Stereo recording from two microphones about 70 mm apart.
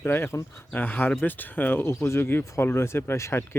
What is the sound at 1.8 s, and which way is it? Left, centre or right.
Speech, left.